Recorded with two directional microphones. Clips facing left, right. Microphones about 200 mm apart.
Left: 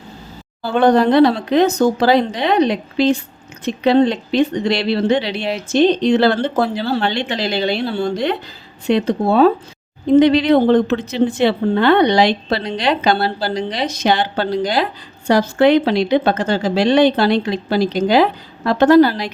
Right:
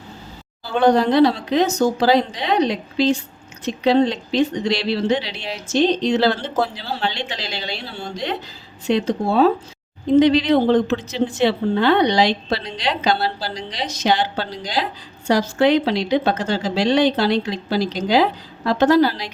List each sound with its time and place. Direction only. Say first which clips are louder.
0.6 s speech: left 3 dB; 55° left (ahead or behind)